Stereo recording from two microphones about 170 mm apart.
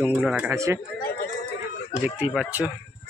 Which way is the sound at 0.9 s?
60° left (ahead or behind).